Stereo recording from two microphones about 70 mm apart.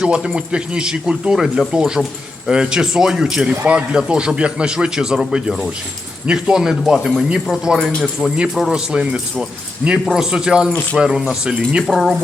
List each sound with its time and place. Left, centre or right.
0.0 s speech: centre
3.5 s speech: right
3.8 s speech: centre
11.9 s speech: centre